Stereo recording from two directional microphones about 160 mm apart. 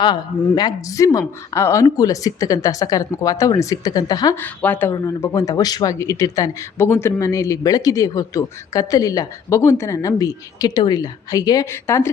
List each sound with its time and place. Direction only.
0.0 s speech: 25° left (ahead or behind)
4.4 s speech: 10° left (ahead or behind)